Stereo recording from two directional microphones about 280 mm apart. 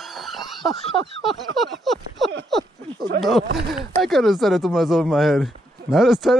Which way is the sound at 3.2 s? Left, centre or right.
Centre.